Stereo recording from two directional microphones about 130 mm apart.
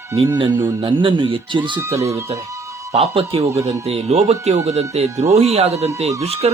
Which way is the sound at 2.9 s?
55° right (ahead or behind).